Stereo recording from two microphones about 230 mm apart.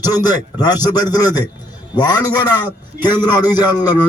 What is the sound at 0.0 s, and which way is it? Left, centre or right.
A man's voice, centre.